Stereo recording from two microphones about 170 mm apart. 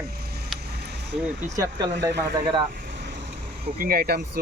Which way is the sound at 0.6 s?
70° right (ahead or behind).